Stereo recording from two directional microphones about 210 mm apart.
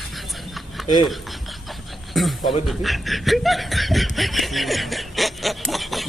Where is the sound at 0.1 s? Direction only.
Centre (ahead or behind).